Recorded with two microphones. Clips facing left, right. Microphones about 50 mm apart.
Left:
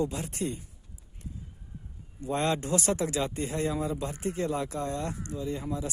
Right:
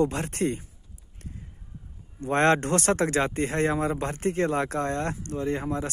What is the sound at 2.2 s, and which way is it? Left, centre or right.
Speech, right.